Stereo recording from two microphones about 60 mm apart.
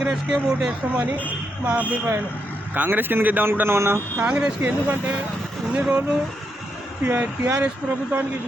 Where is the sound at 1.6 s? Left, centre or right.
Right.